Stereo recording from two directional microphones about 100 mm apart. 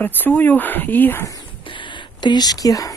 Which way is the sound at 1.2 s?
35° left (ahead or behind).